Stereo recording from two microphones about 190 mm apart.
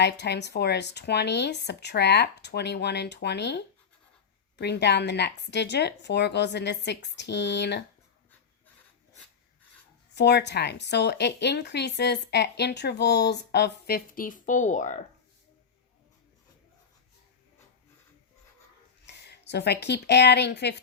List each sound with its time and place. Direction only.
0.0 s speech: 65° left (ahead or behind)
10.2 s speech: 65° left (ahead or behind); by 15.0 s 40° left (ahead or behind)
19.0 s speech: 60° left (ahead or behind)